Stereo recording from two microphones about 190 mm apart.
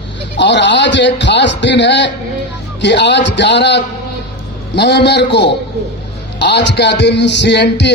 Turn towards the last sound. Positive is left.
turn(degrees=65)  # may be behind; listen again after turning